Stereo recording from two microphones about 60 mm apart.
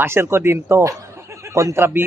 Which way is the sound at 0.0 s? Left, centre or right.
Right.